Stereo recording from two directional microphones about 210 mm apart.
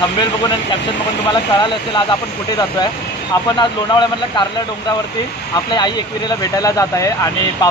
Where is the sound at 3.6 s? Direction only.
20° left (ahead or behind).